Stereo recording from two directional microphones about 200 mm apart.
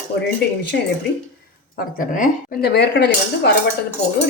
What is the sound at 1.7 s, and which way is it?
Speech, 45° left (ahead or behind).